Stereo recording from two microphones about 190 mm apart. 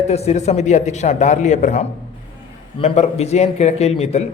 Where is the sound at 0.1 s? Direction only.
35° left (ahead or behind).